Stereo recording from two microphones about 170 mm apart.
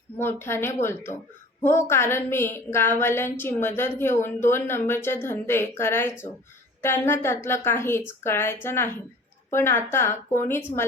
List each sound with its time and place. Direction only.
0.2 s a woman's voice: 15° left (ahead or behind)